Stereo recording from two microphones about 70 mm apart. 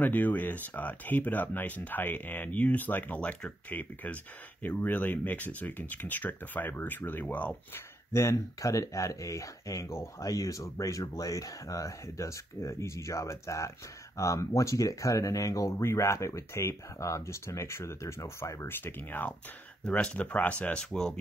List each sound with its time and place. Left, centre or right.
0.0 s speech: left
8.1 s speech: left
18.7 s speech: left
19.8 s speech: centre
20.8 s speech: centre